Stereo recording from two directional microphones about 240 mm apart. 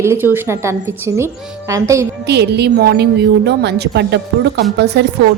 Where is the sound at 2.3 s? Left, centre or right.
Right.